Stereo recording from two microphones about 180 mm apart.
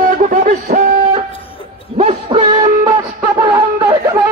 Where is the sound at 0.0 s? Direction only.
50° right (ahead or behind).